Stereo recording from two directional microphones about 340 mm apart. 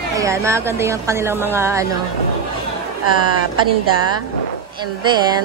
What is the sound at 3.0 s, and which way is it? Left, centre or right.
Speech, right.